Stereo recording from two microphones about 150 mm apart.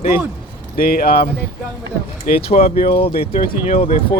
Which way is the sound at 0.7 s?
80° left.